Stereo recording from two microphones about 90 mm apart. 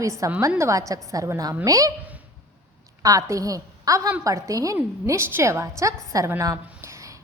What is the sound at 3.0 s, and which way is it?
A woman's voice, 40° right (ahead or behind).